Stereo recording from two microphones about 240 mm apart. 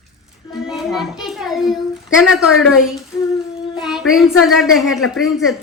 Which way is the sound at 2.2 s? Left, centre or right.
Centre.